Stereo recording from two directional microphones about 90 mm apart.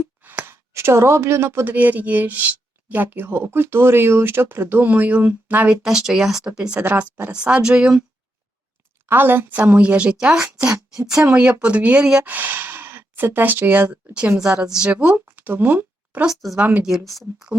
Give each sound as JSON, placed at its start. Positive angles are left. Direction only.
{"t": 0.2, "sound": "a sound", "side_deg": -20}
{"t": 1.7, "sound": "speech", "side_deg": -20}
{"t": 9.0, "sound": "speech", "side_deg": -25}
{"t": 16.2, "sound": "speech", "side_deg": 0}
{"t": 16.6, "sound": "speech", "side_deg": -15}
{"t": 17.1, "sound": "speech", "side_deg": 0}